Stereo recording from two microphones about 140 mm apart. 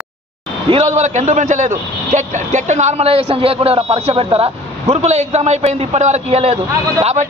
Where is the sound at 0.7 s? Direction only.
50° right (ahead or behind).